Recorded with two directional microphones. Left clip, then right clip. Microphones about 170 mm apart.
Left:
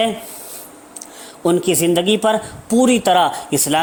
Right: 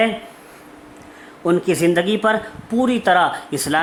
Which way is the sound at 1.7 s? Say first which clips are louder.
Left 1 dB; 30° left (ahead or behind).